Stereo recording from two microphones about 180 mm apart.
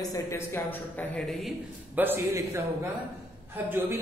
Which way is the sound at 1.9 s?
10° right (ahead or behind).